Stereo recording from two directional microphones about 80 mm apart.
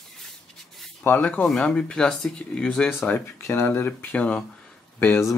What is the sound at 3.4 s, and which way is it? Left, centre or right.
Speech, left.